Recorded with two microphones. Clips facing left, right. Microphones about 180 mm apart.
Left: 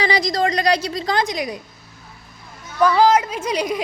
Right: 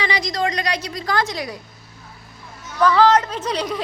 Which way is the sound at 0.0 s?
35° left (ahead or behind).